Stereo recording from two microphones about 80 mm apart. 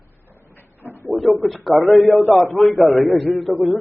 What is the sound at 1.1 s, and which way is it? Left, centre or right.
A man's voice, centre.